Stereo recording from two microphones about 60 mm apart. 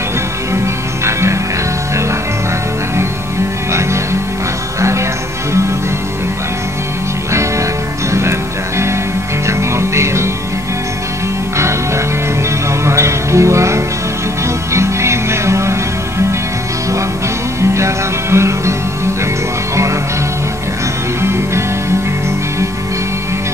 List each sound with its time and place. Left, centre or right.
3.7 s music: right
8.1 s music: right
11.5 s music: right
17.6 s music: right
21.2 s music: right